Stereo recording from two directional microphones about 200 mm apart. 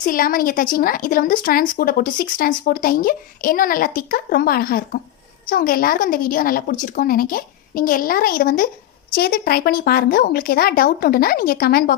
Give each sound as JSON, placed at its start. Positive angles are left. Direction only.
{"t": 0.0, "sound": "a woman's voice", "side_deg": 45}